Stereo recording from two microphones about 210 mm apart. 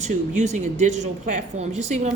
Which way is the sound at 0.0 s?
35° right (ahead or behind).